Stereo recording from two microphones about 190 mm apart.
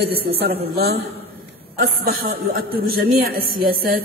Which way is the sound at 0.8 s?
60° right (ahead or behind).